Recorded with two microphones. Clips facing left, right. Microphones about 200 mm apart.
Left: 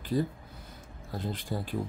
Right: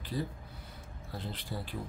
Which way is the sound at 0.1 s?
45° left (ahead or behind).